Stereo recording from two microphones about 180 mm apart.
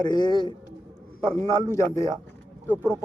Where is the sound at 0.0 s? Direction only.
25° left (ahead or behind).